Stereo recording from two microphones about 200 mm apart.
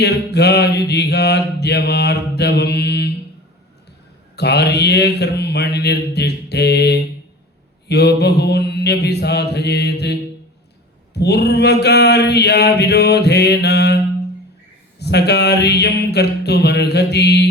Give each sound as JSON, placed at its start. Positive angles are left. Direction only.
{"t": 0.0, "sound": "mantra", "side_deg": 55}
{"t": 4.4, "sound": "mantra", "side_deg": 55}